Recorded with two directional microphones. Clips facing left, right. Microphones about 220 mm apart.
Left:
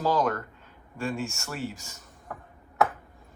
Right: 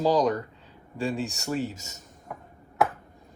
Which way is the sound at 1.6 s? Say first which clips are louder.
Right 4 dB; 40° right (ahead or behind).